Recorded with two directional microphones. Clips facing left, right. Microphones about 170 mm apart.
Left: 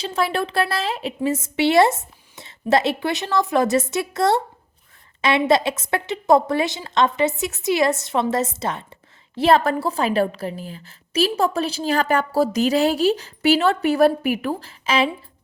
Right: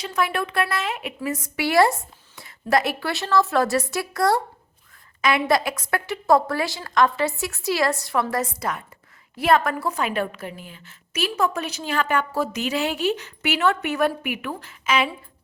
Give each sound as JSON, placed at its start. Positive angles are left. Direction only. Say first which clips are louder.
{"t": 0.0, "sound": "a woman's voice", "louder": "left 2 dB", "side_deg": 30}